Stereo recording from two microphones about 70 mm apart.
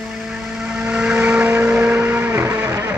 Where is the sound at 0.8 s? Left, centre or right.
Centre.